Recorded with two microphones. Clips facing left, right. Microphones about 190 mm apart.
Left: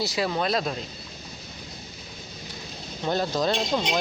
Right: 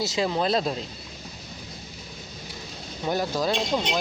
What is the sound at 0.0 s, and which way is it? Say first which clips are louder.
Speech: right 1 dB; 25° right (ahead or behind).